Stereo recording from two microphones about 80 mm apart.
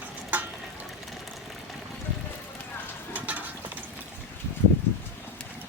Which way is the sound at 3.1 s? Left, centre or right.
Right.